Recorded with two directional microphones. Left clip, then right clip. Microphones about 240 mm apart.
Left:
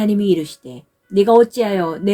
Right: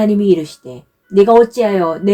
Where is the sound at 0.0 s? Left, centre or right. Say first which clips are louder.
Right 4 dB; left.